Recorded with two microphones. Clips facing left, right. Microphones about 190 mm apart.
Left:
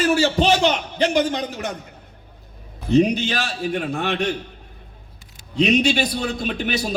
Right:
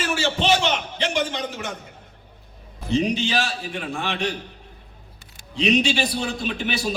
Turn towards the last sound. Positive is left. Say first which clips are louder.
# left 2 dB
turn(degrees=40)  # may be behind; listen again after turning